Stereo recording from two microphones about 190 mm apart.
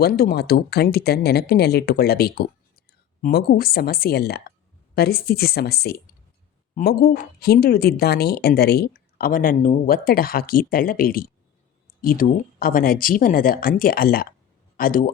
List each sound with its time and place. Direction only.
0.0 s speech: 55° left (ahead or behind)